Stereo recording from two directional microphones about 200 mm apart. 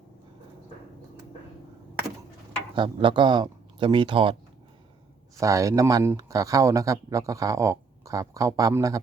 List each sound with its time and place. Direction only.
2.7 s speech: 25° right (ahead or behind)
5.4 s speech: 15° right (ahead or behind)